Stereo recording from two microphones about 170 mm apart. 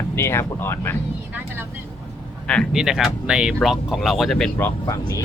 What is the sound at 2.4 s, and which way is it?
Speech, 5° left (ahead or behind).